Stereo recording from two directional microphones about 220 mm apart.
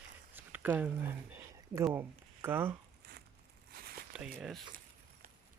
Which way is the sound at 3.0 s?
45° right (ahead or behind).